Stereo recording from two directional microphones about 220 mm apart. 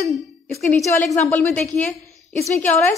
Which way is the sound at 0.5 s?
Centre (ahead or behind).